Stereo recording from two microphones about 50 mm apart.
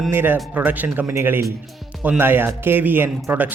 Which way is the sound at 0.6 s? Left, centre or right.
Right.